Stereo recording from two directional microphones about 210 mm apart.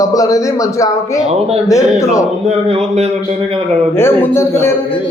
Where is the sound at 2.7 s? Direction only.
30° right (ahead or behind).